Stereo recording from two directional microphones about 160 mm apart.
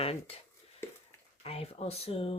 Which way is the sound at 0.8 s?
15° left (ahead or behind).